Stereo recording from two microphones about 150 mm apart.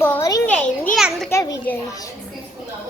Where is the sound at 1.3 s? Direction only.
20° left (ahead or behind).